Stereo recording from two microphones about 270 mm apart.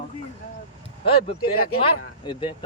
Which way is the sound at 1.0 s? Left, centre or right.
Left.